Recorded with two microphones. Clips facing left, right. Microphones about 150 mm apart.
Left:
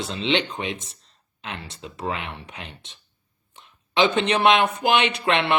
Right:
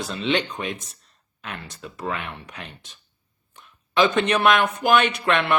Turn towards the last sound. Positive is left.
turn(degrees=25)  # may be behind; listen again after turning